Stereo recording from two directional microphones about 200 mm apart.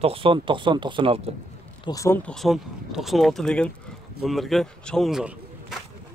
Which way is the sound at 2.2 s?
Centre (ahead or behind).